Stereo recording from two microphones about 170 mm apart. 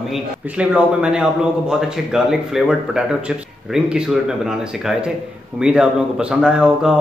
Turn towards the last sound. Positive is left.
turn(degrees=-5)  # may be behind; listen again after turning